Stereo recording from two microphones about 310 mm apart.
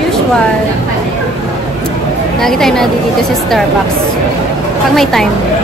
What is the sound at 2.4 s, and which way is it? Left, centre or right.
A woman's voice, centre.